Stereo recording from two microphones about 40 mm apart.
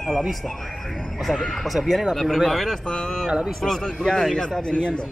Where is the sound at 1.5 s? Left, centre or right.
Centre.